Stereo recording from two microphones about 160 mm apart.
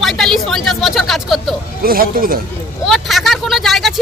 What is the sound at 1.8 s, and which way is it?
Speech, 65° right (ahead or behind).